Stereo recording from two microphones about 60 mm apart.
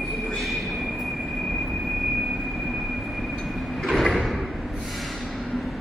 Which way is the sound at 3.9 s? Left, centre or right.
Centre.